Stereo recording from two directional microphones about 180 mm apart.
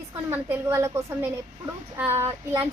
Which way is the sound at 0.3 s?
15° right (ahead or behind).